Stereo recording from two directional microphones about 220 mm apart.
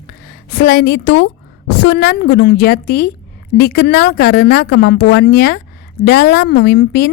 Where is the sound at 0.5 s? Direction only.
45° left (ahead or behind).